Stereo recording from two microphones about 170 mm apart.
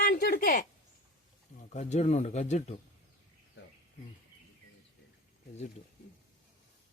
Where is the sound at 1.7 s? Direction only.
40° left (ahead or behind).